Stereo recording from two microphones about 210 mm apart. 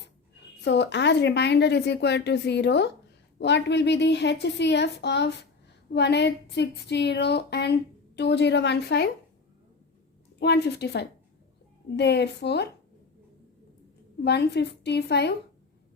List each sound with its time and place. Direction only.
0.6 s a woman's voice: 55° left (ahead or behind)
10.4 s a woman's voice: 50° left (ahead or behind)
14.3 s a woman's voice: 50° left (ahead or behind)